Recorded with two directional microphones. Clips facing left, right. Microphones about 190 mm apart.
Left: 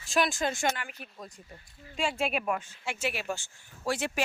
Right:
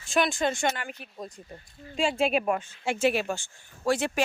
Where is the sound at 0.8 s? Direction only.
30° right (ahead or behind).